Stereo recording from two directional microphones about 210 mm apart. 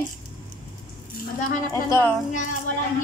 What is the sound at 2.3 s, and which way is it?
Speech, 40° left (ahead or behind).